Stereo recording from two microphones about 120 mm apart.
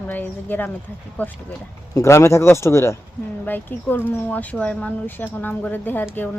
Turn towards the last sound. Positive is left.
turn(degrees=15)  # may be behind; listen again after turning